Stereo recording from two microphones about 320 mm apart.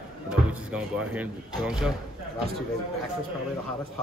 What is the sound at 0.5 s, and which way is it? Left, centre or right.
Speech, centre.